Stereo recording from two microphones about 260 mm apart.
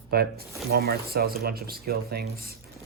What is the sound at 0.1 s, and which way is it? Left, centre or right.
Speech, right.